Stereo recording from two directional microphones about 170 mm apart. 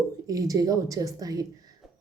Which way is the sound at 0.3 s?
20° right (ahead or behind).